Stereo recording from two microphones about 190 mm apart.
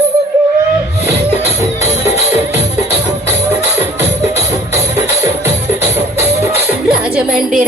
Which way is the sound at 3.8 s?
15° right (ahead or behind).